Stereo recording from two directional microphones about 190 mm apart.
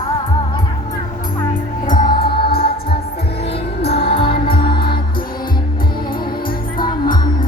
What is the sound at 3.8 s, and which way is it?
Music, 55° left (ahead or behind).